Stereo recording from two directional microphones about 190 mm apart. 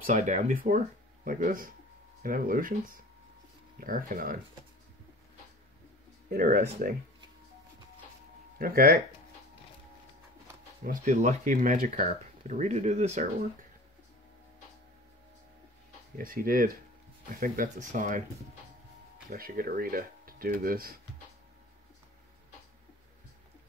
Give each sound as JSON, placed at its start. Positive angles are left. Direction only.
{"t": 0.0, "sound": "speech", "side_deg": -40}
{"t": 6.3, "sound": "speech", "side_deg": -50}
{"t": 8.5, "sound": "speech", "side_deg": -50}
{"t": 10.9, "sound": "speech", "side_deg": -40}
{"t": 16.2, "sound": "speech", "side_deg": -50}
{"t": 19.3, "sound": "speech", "side_deg": -50}